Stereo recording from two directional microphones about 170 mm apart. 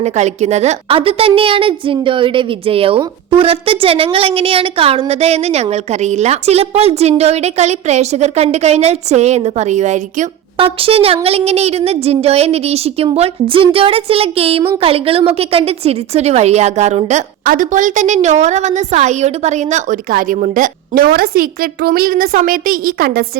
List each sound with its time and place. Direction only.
0.0 s a woman's voice: 40° right (ahead or behind); by 23.4 s 65° right (ahead or behind)